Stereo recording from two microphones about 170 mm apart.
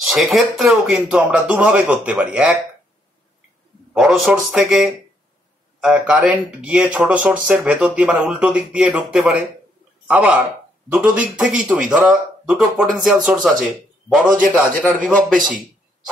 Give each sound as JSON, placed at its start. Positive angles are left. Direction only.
{"t": 0.0, "sound": "speech", "side_deg": 0}
{"t": 3.9, "sound": "speech", "side_deg": 0}
{"t": 14.2, "sound": "a man's voice", "side_deg": -50}
{"t": 15.0, "sound": "speech", "side_deg": 0}